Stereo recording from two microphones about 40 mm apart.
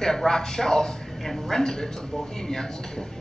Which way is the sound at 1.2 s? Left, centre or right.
Centre.